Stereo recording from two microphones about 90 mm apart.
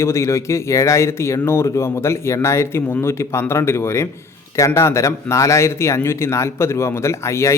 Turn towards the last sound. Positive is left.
turn(degrees=30)  # may be behind; listen again after turning